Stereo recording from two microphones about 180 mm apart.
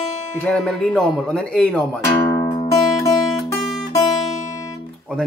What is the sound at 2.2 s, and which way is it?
Music, 35° left (ahead or behind).